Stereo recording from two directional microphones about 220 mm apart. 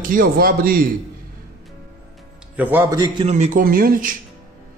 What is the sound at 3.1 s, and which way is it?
Speech, 30° right (ahead or behind).